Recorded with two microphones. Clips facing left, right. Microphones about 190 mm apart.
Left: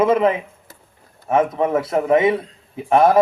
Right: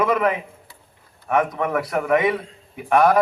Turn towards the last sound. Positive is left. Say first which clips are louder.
# left 3 dB
turn(degrees=25)  # may be behind; listen again after turning